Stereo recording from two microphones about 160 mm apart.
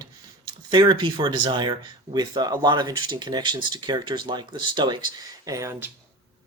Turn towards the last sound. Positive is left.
turn(degrees=-15)  # may be behind; listen again after turning